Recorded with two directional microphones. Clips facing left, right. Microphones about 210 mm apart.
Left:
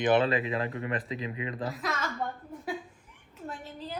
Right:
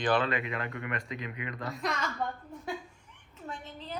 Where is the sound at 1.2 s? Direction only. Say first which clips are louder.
Left 4 dB; 25° left (ahead or behind).